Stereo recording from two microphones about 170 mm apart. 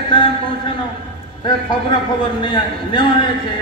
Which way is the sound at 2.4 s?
25° left (ahead or behind).